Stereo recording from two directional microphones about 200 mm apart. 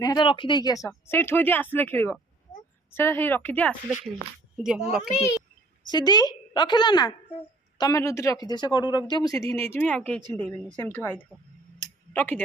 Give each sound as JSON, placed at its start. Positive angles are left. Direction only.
{"t": 0.0, "sound": "speech", "side_deg": 20}
{"t": 4.6, "sound": "a child's voice", "side_deg": -5}
{"t": 5.9, "sound": "a woman's voice", "side_deg": 20}